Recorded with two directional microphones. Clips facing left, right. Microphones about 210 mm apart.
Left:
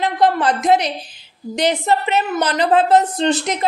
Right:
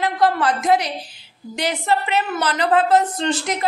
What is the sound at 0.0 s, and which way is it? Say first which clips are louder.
A woman's voice: left 2 dB; 20° left (ahead or behind).